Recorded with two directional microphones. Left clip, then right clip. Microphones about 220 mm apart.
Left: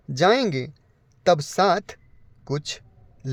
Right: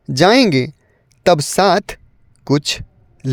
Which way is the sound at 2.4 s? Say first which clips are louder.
Right 12 dB; 40° right (ahead or behind).